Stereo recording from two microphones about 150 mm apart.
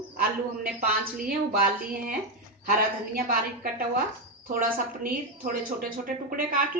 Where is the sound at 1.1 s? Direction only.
75° right (ahead or behind).